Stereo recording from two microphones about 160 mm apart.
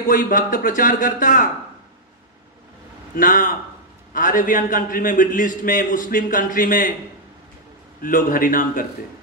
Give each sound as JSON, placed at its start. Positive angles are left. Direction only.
{"t": 0.1, "sound": "a man's voice", "side_deg": 60}
{"t": 3.2, "sound": "a man's voice", "side_deg": 60}
{"t": 8.0, "sound": "a man's voice", "side_deg": 60}